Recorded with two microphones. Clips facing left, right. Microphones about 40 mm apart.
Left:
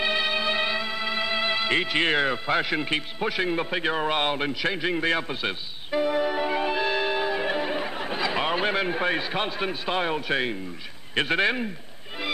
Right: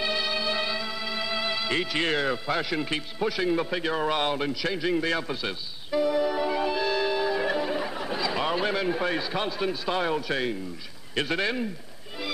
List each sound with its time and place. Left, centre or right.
0.0 s music: left
4.1 s a man's voice: left